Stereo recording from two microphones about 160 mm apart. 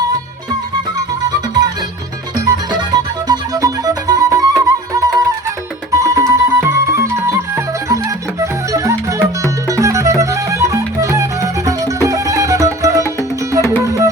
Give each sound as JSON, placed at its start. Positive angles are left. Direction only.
{"t": 2.4, "sound": "music", "side_deg": -20}